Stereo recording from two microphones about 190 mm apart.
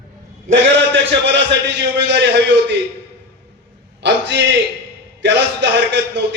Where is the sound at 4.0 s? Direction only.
65° right (ahead or behind).